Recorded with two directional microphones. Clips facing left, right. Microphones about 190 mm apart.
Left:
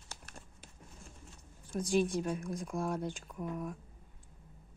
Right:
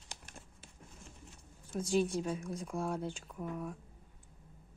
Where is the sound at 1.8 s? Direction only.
15° left (ahead or behind).